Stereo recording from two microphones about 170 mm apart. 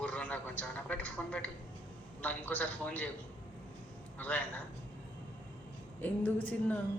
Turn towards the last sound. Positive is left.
turn(degrees=10)  # may be behind; listen again after turning